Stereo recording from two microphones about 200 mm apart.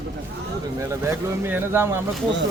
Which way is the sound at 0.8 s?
15° right (ahead or behind).